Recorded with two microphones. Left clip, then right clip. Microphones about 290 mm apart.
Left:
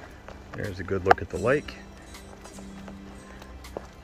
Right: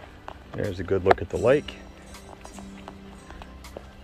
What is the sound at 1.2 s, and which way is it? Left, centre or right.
Speech, centre.